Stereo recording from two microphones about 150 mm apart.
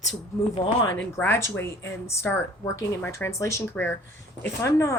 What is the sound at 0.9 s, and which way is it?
Speech, 15° left (ahead or behind).